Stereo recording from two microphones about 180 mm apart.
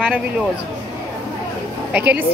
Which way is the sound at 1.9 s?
10° right (ahead or behind).